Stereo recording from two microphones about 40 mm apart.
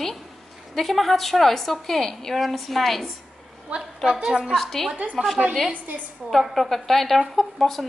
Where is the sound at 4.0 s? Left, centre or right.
Centre.